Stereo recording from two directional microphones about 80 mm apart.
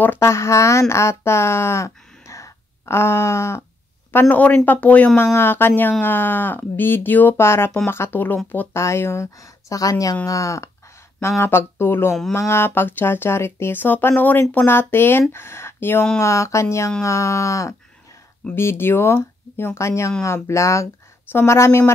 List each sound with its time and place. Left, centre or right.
0.2 s speech: left
4.1 s speech: left
5.2 s speech: left
8.7 s speech: left
11.1 s speech: left
18.5 s speech: left